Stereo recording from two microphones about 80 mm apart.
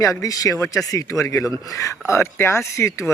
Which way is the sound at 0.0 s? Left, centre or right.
Left.